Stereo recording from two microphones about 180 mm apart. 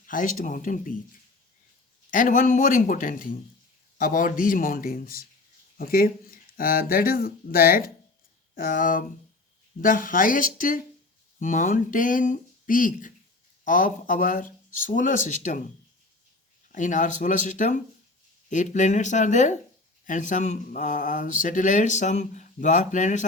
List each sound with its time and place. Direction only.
0.1 s speech: 45° left (ahead or behind)
2.0 s speech: 45° left (ahead or behind)
16.7 s speech: 45° left (ahead or behind)